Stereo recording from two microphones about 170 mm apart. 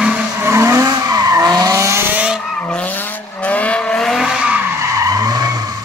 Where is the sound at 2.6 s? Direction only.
5° left (ahead or behind).